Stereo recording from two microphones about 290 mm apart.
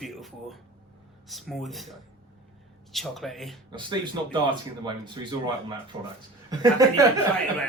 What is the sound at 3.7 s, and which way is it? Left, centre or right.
Speech, centre.